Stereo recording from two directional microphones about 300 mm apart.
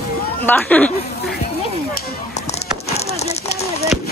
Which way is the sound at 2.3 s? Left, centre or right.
Left.